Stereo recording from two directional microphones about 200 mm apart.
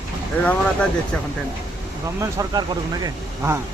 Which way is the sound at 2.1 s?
15° right (ahead or behind).